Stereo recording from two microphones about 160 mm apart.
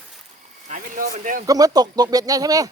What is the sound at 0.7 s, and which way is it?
Speech, 55° right (ahead or behind).